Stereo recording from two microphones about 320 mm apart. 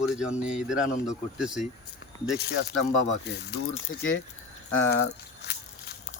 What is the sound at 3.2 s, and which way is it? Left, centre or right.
Speech, left.